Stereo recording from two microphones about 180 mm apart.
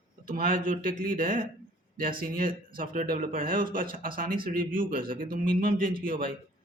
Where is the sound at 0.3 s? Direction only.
50° right (ahead or behind).